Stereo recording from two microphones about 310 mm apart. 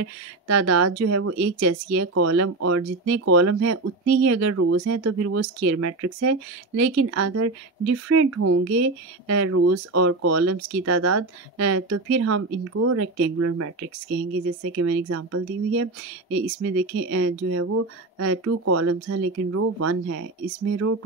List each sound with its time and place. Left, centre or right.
0.0 s speech: right